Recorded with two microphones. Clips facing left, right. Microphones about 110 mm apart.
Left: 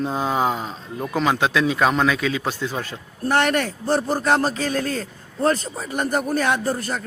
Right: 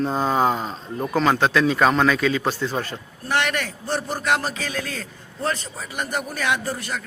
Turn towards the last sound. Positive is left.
turn(degrees=40)  # may be behind; listen again after turning